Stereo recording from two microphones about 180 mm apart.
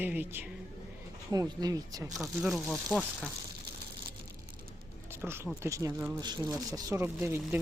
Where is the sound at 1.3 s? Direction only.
20° right (ahead or behind).